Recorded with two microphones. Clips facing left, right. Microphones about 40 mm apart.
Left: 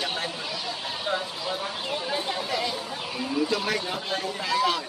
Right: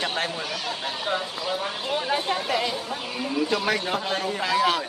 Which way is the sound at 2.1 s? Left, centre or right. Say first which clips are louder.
Right 4 dB; right.